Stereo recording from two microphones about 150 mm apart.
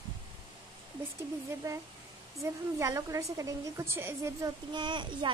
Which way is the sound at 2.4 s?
20° right (ahead or behind).